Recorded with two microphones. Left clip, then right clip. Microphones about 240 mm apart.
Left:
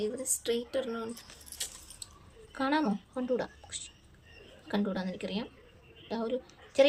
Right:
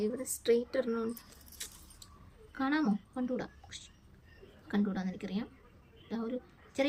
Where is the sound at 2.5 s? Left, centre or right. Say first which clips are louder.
Left 3 dB; centre.